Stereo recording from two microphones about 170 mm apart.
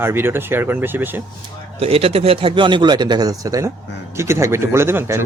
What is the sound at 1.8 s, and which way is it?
Speech, 35° right (ahead or behind).